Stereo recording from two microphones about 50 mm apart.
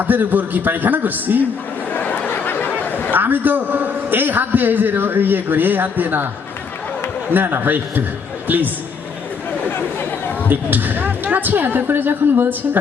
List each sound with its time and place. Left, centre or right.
0.0 s a man's voice: right
1.9 s a sound: left
2.8 s chatter: left
3.1 s a man's voice: right
7.3 s a man's voice: right
9.6 s chatter: left
10.5 s a man's voice: right